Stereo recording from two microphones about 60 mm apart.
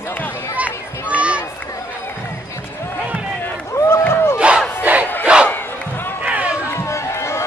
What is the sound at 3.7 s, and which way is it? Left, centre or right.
Run, left.